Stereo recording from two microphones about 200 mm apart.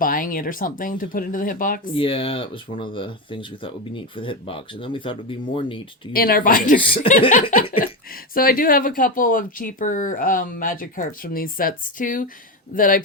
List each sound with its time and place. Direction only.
0.0 s speech: 45° left (ahead or behind)
1.9 s speech: 25° left (ahead or behind)
6.1 s speech: 50° left (ahead or behind)
7.2 s chuckle: 40° left (ahead or behind)
7.5 s speech: 45° left (ahead or behind)